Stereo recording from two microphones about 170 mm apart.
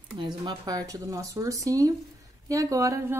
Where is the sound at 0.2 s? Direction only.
25° right (ahead or behind).